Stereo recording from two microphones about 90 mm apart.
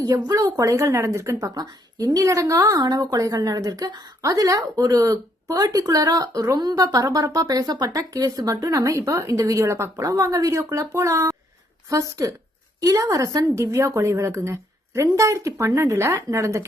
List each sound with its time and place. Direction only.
0.0 s speech: 40° right (ahead or behind)